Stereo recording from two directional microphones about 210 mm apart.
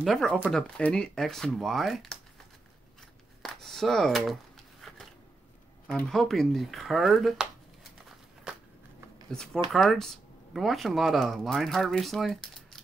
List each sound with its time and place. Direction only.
0.0 s speech: centre (ahead or behind)
3.4 s speech: centre (ahead or behind)
4.8 s a sound: centre (ahead or behind)
5.9 s speech: 5° left (ahead or behind)
9.3 s speech: 5° left (ahead or behind)